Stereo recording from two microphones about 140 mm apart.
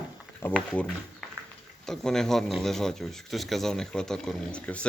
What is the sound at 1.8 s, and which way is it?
A man's voice, 5° left (ahead or behind).